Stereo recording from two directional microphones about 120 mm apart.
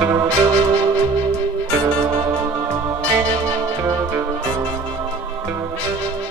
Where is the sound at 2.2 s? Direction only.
25° right (ahead or behind).